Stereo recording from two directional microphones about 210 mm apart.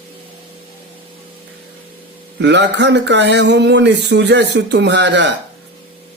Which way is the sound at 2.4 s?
55° right (ahead or behind).